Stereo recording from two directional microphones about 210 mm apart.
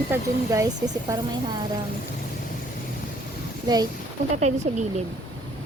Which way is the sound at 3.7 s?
20° right (ahead or behind).